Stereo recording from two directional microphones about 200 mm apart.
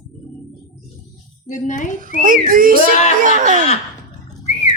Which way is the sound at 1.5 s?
40° left (ahead or behind).